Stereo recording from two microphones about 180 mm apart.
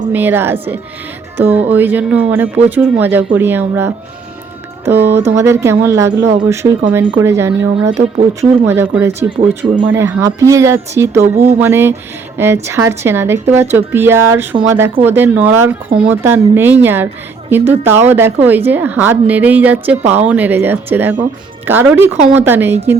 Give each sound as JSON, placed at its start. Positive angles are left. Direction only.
{"t": 0.1, "sound": "speech", "side_deg": -10}